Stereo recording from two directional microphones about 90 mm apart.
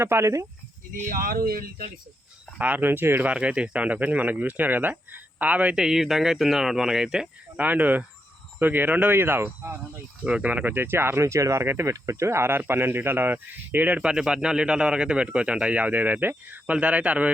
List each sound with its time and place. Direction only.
0.0 s speech: 30° right (ahead or behind)
2.6 s speech: 15° right (ahead or behind)